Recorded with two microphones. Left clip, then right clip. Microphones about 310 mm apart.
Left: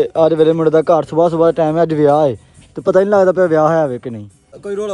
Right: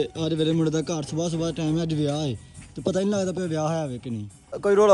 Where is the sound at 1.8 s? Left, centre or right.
Centre.